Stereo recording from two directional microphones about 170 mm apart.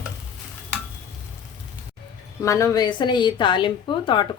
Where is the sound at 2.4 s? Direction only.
15° left (ahead or behind).